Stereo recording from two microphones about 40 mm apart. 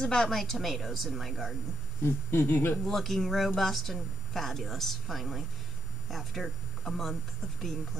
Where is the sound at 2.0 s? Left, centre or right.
Left.